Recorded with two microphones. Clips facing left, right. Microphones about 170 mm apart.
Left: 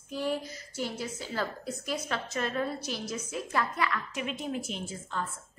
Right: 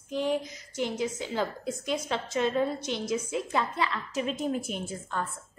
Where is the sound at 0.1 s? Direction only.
20° right (ahead or behind).